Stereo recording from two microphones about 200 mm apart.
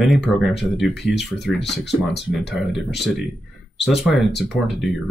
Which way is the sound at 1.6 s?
60° left (ahead or behind).